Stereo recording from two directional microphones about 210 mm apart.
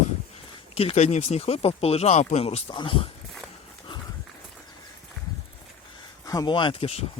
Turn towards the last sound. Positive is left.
turn(degrees=25)  # may be behind; listen again after turning